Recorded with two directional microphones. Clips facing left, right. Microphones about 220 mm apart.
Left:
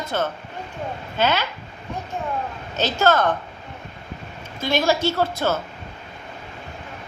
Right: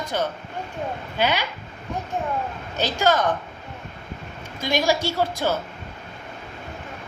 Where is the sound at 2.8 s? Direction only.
15° right (ahead or behind).